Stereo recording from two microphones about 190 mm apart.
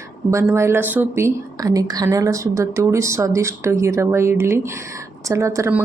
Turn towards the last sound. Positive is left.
turn(degrees=-15)  # may be behind; listen again after turning